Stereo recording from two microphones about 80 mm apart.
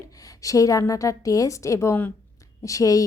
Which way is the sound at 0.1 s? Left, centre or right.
Left.